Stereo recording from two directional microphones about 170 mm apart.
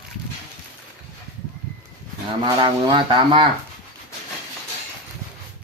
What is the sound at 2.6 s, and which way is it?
Speech, 30° right (ahead or behind).